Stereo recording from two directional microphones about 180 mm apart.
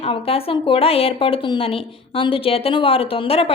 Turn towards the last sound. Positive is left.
turn(degrees=30)  # may be behind; listen again after turning